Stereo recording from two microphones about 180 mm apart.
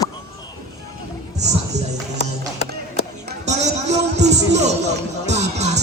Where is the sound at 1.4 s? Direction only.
40° right (ahead or behind).